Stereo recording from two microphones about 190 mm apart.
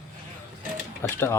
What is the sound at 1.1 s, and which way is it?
Speech, 15° left (ahead or behind).